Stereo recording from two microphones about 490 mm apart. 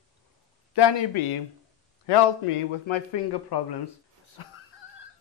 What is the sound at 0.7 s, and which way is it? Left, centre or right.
Speech, left.